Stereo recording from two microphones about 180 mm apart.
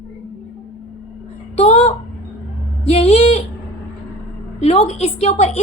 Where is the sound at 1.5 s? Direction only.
30° left (ahead or behind).